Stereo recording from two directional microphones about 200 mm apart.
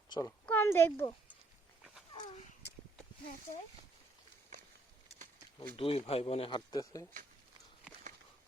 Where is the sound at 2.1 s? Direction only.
25° left (ahead or behind).